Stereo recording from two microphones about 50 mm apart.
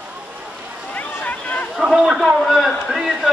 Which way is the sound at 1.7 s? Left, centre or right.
Centre.